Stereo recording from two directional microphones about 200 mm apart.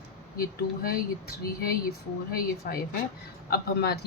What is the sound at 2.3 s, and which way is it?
Speech, 50° left (ahead or behind).